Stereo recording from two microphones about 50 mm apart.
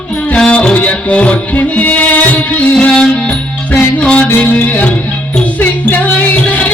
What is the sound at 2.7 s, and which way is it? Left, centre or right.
Music, centre.